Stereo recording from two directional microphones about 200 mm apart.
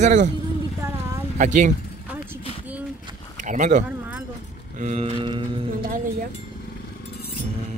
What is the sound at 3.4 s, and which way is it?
Speech, 40° right (ahead or behind).